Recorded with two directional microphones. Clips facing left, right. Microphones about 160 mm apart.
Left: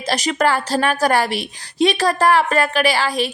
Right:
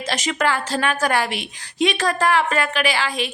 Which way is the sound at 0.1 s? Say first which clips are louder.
Left 4 dB; 40° left (ahead or behind).